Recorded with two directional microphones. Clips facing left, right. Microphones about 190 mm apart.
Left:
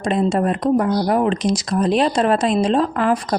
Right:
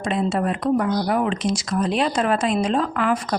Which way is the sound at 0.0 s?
40° left (ahead or behind).